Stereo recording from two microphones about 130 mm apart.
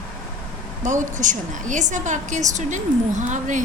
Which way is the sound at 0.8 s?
75° right (ahead or behind).